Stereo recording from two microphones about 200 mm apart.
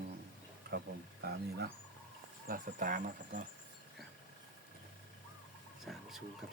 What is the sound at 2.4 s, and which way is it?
Speech, 45° right (ahead or behind).